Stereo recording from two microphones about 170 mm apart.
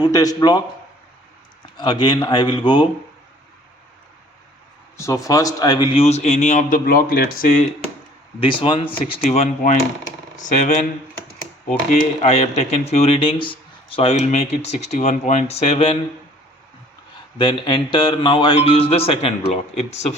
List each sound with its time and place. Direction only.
0.0 s speech: 20° left (ahead or behind)
1.7 s speech: 25° left (ahead or behind)
4.9 s speech: 20° left (ahead or behind); by 7.7 s 55° left (ahead or behind)
8.4 s speech: 30° left (ahead or behind); by 10.8 s 45° left (ahead or behind)
12.2 s speech: 40° left (ahead or behind)
17.3 s speech: 25° left (ahead or behind)